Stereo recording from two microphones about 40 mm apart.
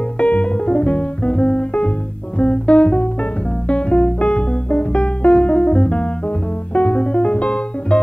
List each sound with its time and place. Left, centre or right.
0.2 s music: left